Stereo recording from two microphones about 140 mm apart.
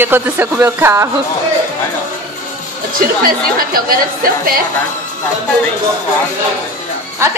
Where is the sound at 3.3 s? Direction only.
90° right.